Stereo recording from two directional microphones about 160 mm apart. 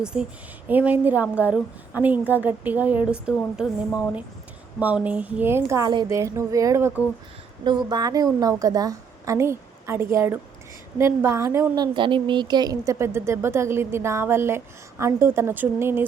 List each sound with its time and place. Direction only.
0.0 s a woman's voice: 5° right (ahead or behind)